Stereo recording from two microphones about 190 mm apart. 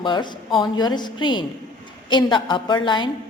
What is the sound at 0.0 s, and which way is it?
A woman's voice, 25° left (ahead or behind).